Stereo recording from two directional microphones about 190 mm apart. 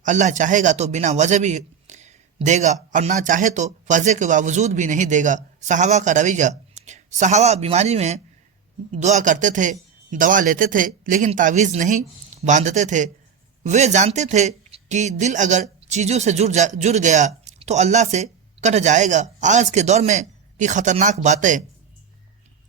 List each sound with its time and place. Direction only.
0.0 s speech: 40° right (ahead or behind)